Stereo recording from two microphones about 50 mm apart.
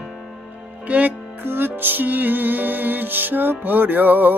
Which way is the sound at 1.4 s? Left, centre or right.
Right.